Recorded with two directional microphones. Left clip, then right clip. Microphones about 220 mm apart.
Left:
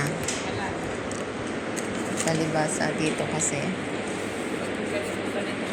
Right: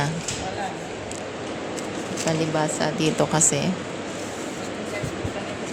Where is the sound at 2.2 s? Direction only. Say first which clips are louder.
Right 3 dB; 25° right (ahead or behind).